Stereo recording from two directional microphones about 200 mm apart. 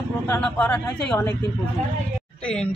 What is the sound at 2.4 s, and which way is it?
Speech, 5° left (ahead or behind).